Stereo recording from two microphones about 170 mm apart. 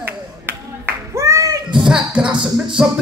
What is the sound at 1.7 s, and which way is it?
Music, 5° right (ahead or behind).